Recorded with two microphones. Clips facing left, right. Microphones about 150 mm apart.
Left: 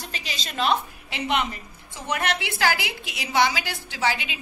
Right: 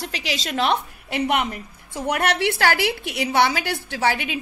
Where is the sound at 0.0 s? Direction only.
80° right.